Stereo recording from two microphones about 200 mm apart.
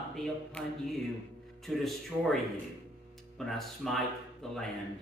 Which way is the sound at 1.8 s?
Centre (ahead or behind).